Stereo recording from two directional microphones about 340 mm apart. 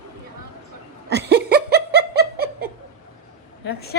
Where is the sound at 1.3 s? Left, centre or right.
Right.